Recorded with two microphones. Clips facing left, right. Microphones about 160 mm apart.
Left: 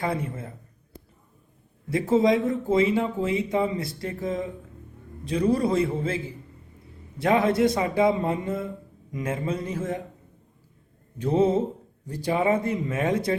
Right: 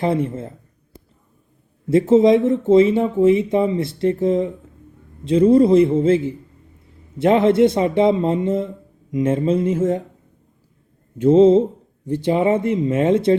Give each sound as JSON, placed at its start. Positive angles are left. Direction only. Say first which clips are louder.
{"t": 0.0, "sound": "speech", "louder": "right 8 dB", "side_deg": -25}
{"t": 1.9, "sound": "speech", "louder": "right 8 dB", "side_deg": -25}
{"t": 11.2, "sound": "speech", "louder": "right 10 dB", "side_deg": -25}